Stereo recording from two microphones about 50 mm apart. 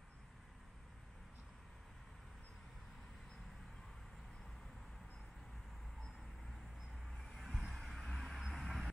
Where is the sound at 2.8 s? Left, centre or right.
Centre.